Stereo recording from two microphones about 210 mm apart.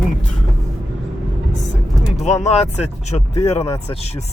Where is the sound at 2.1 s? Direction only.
30° left (ahead or behind).